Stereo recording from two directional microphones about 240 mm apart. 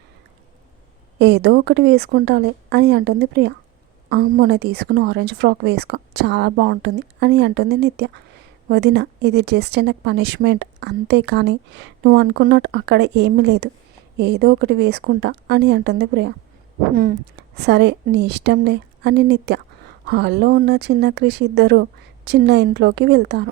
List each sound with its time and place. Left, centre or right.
1.2 s speech: right